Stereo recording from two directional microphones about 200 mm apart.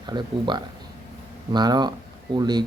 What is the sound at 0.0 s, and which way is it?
Speech, 20° right (ahead or behind).